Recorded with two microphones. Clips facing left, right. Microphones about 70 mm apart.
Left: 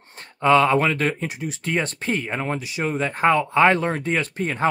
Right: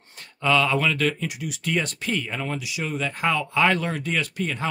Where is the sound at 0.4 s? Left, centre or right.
Left.